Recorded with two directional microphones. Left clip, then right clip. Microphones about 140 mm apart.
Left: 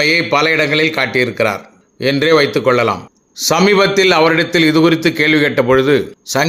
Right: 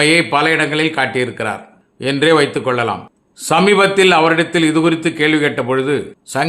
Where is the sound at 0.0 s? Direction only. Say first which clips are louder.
Even; 20° left (ahead or behind).